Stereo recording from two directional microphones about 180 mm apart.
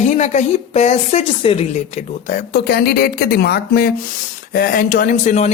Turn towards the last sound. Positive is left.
turn(degrees=40)  # may be behind; listen again after turning